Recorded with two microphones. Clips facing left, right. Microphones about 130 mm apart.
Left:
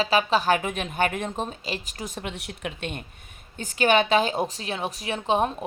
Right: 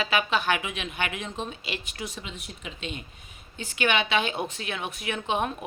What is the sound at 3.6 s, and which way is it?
A woman's voice, 40° left (ahead or behind).